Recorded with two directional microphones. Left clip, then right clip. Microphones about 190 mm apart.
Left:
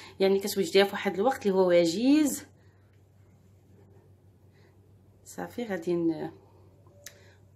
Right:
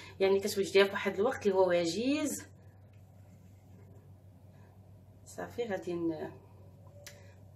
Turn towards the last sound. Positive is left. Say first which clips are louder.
# left 6 dB
turn(degrees=50)  # may be behind; listen again after turning